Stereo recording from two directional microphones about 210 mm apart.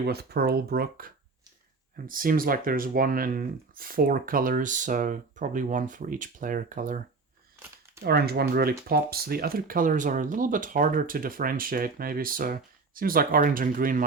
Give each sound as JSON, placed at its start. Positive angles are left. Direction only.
{"t": 0.1, "sound": "speech", "side_deg": -50}
{"t": 8.0, "sound": "speech", "side_deg": -45}